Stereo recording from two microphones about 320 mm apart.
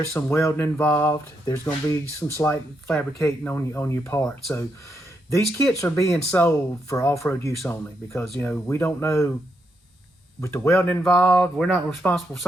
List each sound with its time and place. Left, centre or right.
0.1 s speech: centre
10.4 s speech: centre